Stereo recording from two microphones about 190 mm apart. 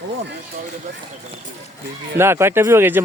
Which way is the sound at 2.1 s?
15° right (ahead or behind).